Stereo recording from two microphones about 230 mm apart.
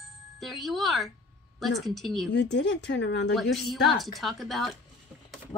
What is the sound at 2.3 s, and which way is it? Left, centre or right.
Speech, left.